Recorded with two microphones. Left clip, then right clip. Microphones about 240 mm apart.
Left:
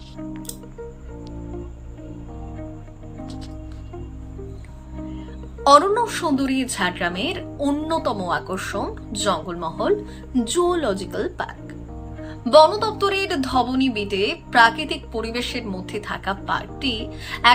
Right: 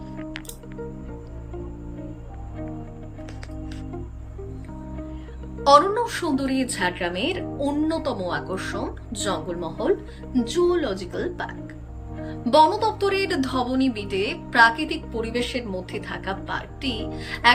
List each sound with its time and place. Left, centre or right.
5.6 s a woman's voice: centre